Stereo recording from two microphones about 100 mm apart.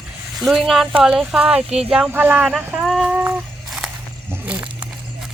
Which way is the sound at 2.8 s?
Centre (ahead or behind).